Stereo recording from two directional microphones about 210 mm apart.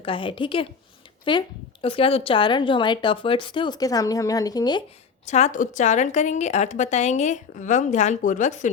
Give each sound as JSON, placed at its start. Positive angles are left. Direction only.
{"t": 0.0, "sound": "a woman's voice", "side_deg": 25}
{"t": 5.2, "sound": "a woman's voice", "side_deg": 35}